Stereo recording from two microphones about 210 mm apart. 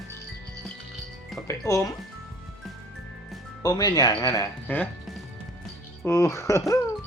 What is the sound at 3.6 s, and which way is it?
Speech, 20° left (ahead or behind).